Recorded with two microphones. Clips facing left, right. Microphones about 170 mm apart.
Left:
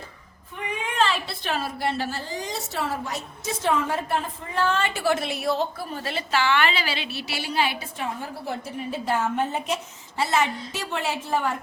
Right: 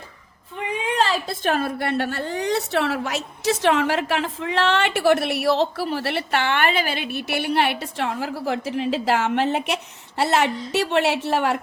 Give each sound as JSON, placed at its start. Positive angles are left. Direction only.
{"t": 0.9, "sound": "a woman's voice", "side_deg": -35}